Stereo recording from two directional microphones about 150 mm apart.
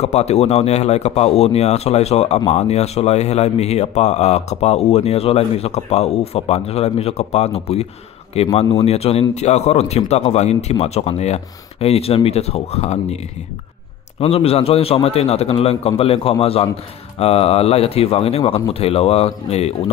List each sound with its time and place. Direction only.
0.0 s speech: 45° left (ahead or behind)
14.2 s a man's voice: 40° left (ahead or behind)